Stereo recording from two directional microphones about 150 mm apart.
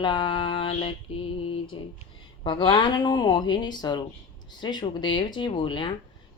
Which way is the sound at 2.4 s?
30° left (ahead or behind).